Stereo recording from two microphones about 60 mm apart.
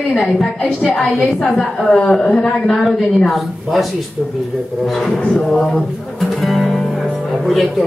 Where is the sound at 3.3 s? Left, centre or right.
Centre.